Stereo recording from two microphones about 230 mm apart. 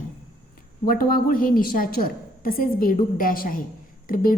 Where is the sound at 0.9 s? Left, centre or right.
Left.